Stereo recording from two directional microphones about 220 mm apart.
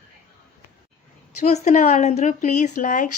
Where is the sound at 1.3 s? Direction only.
30° left (ahead or behind).